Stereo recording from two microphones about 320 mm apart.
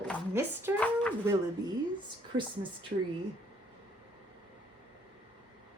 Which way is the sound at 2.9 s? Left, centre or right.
Right.